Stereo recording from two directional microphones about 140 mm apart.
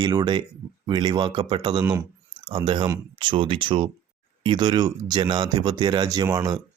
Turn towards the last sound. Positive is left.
turn(degrees=-25)  # may be behind; listen again after turning